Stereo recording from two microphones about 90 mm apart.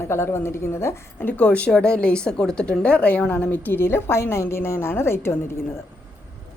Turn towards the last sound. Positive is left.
turn(degrees=30)  # may be behind; listen again after turning